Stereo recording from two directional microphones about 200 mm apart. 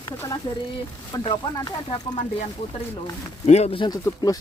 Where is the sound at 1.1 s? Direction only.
20° left (ahead or behind).